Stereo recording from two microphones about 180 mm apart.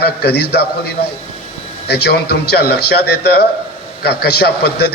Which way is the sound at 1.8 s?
65° left (ahead or behind).